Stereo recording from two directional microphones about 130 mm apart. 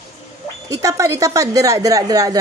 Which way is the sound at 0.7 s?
25° right (ahead or behind).